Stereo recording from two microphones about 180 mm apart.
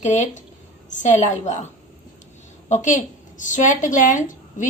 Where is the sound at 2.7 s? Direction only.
45° left (ahead or behind).